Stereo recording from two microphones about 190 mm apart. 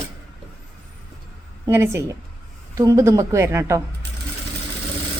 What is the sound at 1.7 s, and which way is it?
A woman's voice, 15° right (ahead or behind).